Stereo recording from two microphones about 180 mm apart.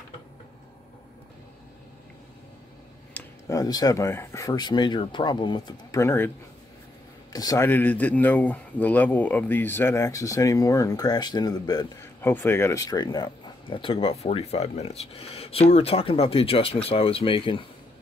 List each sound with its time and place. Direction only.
3.2 s speech: 20° left (ahead or behind)
7.3 s speech: 20° left (ahead or behind)